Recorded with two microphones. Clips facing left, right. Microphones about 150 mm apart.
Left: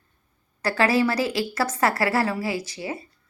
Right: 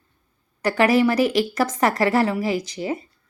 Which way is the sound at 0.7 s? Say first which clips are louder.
Right 4 dB; 15° right (ahead or behind).